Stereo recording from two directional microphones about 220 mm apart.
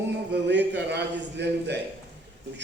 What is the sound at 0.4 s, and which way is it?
A man's voice, 50° right (ahead or behind).